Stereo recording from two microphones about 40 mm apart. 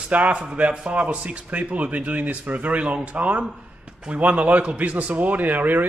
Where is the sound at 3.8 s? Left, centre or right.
Right.